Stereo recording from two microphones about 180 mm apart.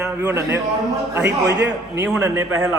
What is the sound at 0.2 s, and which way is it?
A man's voice, 10° right (ahead or behind).